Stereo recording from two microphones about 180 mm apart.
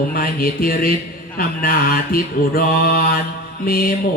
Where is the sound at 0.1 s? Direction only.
55° left (ahead or behind).